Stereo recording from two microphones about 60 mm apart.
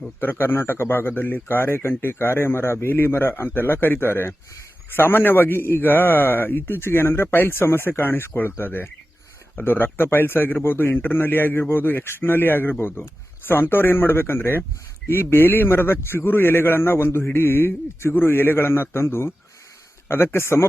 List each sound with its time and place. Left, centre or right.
0.2 s a man's voice: left